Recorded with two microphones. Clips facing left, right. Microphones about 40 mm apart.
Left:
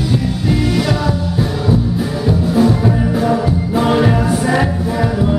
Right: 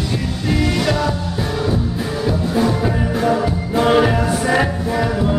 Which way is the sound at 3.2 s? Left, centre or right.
Centre.